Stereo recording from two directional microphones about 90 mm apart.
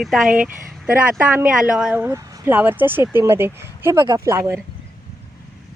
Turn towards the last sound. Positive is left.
turn(degrees=-30)  # may be behind; listen again after turning